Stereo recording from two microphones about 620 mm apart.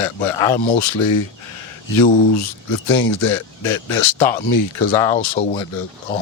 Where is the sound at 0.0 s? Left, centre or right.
Left.